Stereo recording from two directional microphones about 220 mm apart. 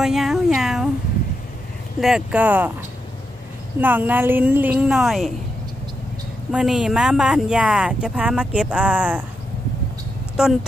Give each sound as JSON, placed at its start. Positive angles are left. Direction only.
{"t": 0.0, "sound": "a sound", "side_deg": 0}
{"t": 2.0, "sound": "a woman's voice", "side_deg": 0}
{"t": 3.8, "sound": "a woman's voice", "side_deg": -10}
{"t": 6.5, "sound": "speech", "side_deg": -5}
{"t": 10.4, "sound": "speech", "side_deg": -5}